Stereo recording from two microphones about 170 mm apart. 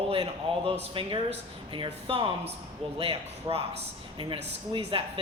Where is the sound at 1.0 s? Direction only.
30° right (ahead or behind).